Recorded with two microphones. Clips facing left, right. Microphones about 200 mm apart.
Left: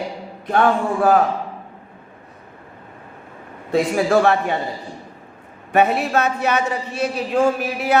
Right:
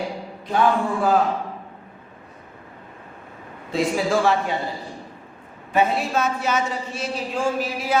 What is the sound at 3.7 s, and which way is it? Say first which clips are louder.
Speech: left 4 dB; 60° left (ahead or behind).